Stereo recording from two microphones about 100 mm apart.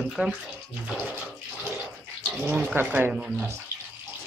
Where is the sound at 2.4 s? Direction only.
20° right (ahead or behind).